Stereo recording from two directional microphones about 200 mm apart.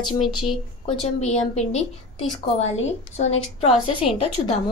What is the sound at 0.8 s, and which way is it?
A woman's voice, 35° left (ahead or behind).